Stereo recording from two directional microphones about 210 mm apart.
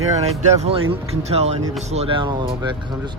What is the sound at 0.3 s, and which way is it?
Speech, 30° right (ahead or behind).